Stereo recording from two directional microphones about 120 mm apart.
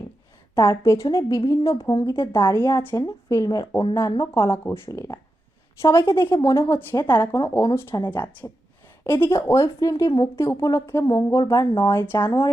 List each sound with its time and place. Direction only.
0.5 s a woman's voice: 25° left (ahead or behind)
11.0 s a woman's voice: 35° left (ahead or behind)